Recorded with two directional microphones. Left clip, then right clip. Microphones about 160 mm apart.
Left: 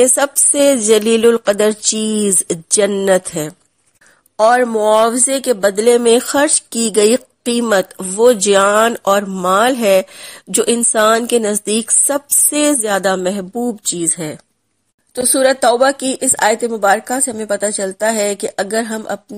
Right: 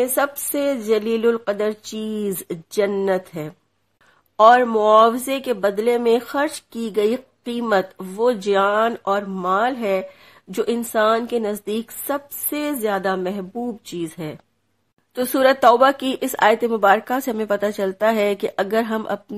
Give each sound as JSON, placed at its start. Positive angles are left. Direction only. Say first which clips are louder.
{"t": 0.0, "sound": "speech", "louder": "left 7 dB", "side_deg": 40}
{"t": 4.4, "sound": "speech", "louder": "left 1 dB", "side_deg": 20}
{"t": 15.2, "sound": "speech", "louder": "left 2 dB", "side_deg": 10}